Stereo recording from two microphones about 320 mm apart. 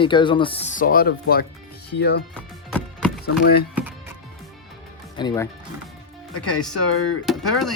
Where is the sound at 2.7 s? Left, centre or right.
Centre.